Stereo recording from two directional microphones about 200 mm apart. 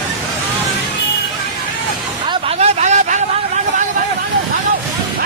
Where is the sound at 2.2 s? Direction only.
30° right (ahead or behind).